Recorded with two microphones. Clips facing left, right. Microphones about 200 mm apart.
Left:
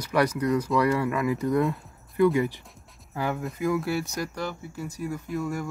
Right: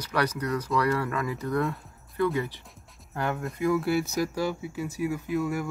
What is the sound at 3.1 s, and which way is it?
Speech, 5° left (ahead or behind).